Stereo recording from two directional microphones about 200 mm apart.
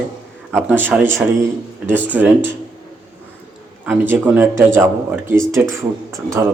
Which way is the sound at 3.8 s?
10° right (ahead or behind).